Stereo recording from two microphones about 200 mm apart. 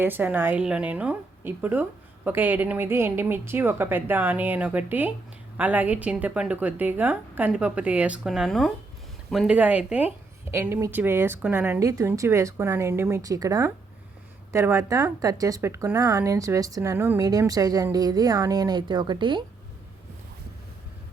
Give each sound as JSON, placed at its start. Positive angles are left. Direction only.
{"t": 0.0, "sound": "a woman's voice", "side_deg": -10}